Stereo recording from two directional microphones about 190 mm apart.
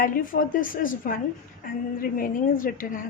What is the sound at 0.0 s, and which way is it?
A woman's voice, 45° left (ahead or behind).